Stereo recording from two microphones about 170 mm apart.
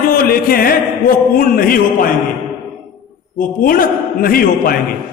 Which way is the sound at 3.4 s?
55° left (ahead or behind).